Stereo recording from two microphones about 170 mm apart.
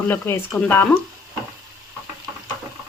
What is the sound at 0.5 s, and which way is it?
Speech, 10° left (ahead or behind).